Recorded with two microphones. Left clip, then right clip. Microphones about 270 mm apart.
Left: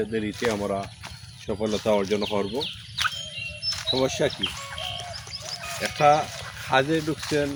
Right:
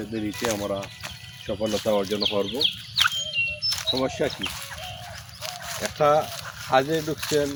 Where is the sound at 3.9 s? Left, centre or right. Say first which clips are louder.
Left 3 dB; centre.